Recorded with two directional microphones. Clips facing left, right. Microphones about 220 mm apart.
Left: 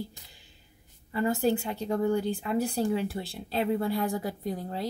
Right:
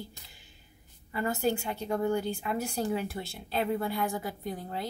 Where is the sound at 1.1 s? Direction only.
35° left (ahead or behind).